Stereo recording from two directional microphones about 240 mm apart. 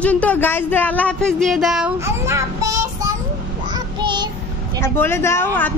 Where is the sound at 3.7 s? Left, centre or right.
Centre.